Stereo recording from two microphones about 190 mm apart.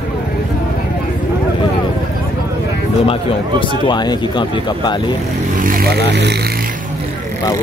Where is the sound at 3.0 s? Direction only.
30° left (ahead or behind).